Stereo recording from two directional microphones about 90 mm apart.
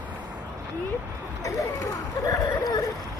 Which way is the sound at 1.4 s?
40° left (ahead or behind).